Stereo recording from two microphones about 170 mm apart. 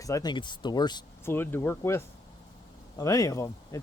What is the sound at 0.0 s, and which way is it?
Speech, 20° left (ahead or behind).